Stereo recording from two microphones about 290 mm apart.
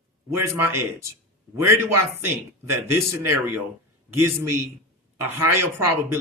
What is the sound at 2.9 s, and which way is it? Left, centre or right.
Speech, right.